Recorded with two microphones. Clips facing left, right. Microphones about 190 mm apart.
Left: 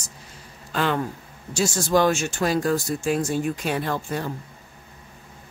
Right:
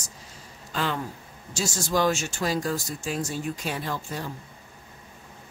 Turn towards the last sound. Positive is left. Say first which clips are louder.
# left 5 dB
turn(degrees=60)  # may be behind; listen again after turning